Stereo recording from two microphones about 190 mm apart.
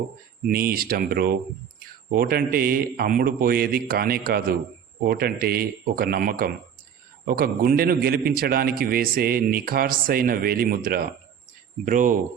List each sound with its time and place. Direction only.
0.4 s a man's voice: 50° right (ahead or behind)